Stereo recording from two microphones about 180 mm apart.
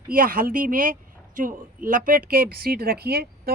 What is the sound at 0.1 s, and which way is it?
Speech, 50° right (ahead or behind).